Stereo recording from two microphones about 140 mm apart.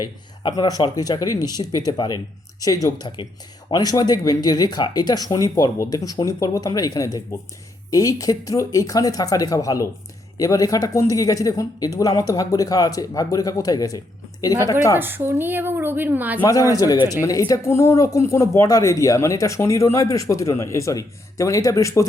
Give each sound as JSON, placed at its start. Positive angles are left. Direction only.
{"t": 0.0, "sound": "a man's voice", "side_deg": 30}
{"t": 14.9, "sound": "speech", "side_deg": -15}
{"t": 16.4, "sound": "speech", "side_deg": 25}